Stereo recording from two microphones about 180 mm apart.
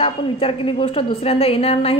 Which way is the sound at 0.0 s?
30° left (ahead or behind).